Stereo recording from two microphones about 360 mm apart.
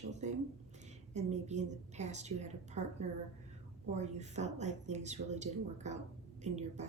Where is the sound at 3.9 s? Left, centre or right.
Centre.